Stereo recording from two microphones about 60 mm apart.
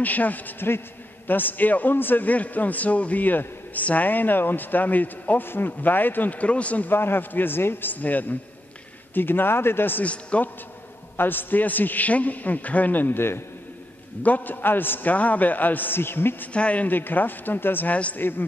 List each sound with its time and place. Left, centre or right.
0.0 s a man's voice: left
6.9 s a man's voice: left
10.0 s a man's voice: left
11.1 s a man's voice: left
16.5 s a man's voice: left
17.9 s a man's voice: left